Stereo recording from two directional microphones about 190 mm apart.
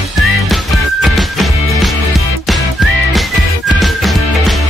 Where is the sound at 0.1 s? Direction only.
Centre (ahead or behind).